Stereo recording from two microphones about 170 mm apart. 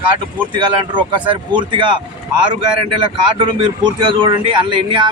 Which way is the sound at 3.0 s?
30° right (ahead or behind).